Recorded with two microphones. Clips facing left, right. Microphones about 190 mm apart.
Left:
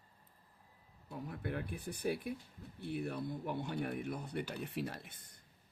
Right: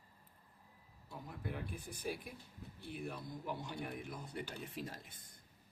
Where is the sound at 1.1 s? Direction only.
65° left (ahead or behind).